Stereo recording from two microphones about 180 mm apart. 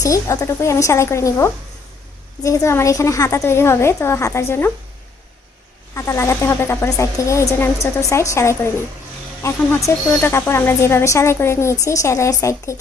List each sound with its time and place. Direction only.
0.0 s speech: 20° left (ahead or behind)
5.9 s speech: 15° left (ahead or behind)